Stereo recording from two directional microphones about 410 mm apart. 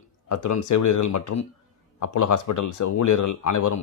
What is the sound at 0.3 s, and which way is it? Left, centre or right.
Speech, left.